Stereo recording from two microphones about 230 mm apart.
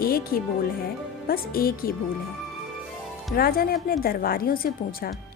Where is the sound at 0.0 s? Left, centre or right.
Left.